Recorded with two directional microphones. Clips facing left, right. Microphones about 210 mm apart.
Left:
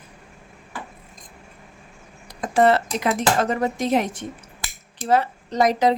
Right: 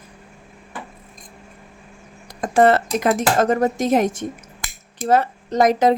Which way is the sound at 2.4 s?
50° right (ahead or behind).